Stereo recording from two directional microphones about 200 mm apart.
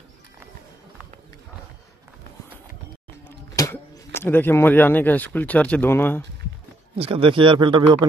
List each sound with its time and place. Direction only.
3.5 s speech: 15° left (ahead or behind)
7.0 s speech: 25° right (ahead or behind)